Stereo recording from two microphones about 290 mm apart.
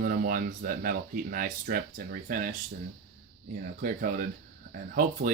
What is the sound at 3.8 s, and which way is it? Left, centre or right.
Speech, right.